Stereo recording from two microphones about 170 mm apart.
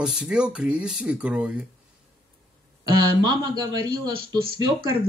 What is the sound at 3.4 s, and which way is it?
Speech, 25° right (ahead or behind).